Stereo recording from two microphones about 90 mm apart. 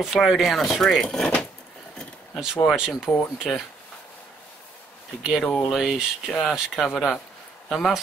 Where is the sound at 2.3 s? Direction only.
10° right (ahead or behind).